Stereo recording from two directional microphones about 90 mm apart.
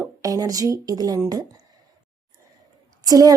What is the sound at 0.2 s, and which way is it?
Speech, 40° right (ahead or behind).